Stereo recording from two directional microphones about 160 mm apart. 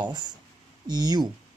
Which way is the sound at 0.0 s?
25° right (ahead or behind).